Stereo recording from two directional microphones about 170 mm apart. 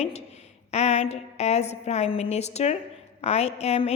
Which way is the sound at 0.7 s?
40° left (ahead or behind).